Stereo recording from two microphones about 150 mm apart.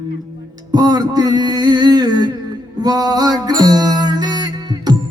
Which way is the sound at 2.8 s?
25° right (ahead or behind).